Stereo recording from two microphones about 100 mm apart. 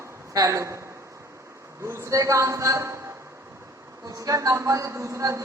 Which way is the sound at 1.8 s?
30° right (ahead or behind).